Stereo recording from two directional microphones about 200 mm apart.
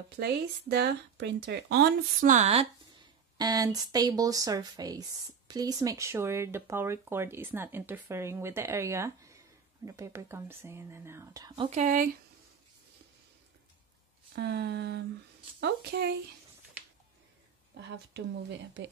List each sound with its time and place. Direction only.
0.2 s speech: 55° right (ahead or behind); by 2.7 s 30° right (ahead or behind)
3.3 s speech: 20° right (ahead or behind)
11.8 s speech: 40° right (ahead or behind)
14.3 s speech: 55° right (ahead or behind)
17.7 s speech: 60° right (ahead or behind)